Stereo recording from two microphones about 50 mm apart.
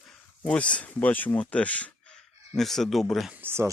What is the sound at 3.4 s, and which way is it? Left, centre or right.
Speech, right.